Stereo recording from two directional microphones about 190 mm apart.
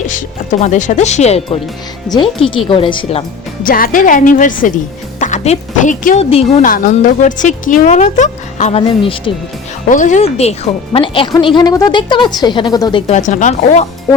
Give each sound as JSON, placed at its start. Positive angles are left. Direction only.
{"t": 0.1, "sound": "speech", "side_deg": 40}
{"t": 2.6, "sound": "speech", "side_deg": 25}
{"t": 3.6, "sound": "speech", "side_deg": 50}
{"t": 9.8, "sound": "speech", "side_deg": 40}
{"t": 13.1, "sound": "speech", "side_deg": 40}